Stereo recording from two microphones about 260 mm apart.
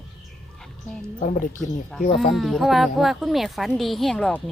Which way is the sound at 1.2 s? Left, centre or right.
Left.